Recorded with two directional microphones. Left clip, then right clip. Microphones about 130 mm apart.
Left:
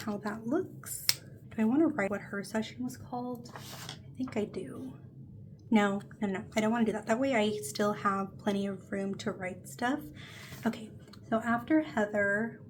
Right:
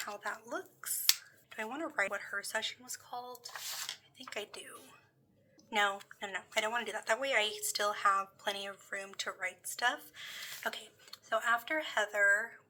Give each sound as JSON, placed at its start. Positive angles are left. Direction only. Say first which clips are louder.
{"t": 0.0, "sound": "a woman's voice", "louder": "left 3 dB", "side_deg": -15}
{"t": 4.2, "sound": "speech", "louder": "left 10 dB", "side_deg": -15}
{"t": 5.7, "sound": "a woman's voice", "louder": "left 2 dB", "side_deg": -15}
{"t": 11.3, "sound": "speech", "louder": "left 2 dB", "side_deg": -30}